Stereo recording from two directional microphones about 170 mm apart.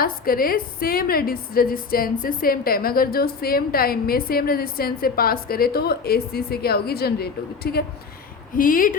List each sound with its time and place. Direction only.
0.0 s a woman's voice: 60° left (ahead or behind)
8.5 s a woman's voice: 55° left (ahead or behind)